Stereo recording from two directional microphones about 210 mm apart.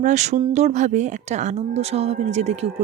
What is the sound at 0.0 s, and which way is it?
Speech, 35° right (ahead or behind).